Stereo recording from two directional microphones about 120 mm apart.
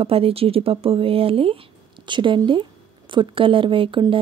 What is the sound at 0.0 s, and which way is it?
Speech, 50° right (ahead or behind).